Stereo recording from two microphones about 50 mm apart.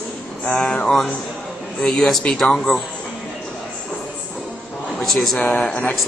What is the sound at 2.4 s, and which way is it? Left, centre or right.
Speech, centre.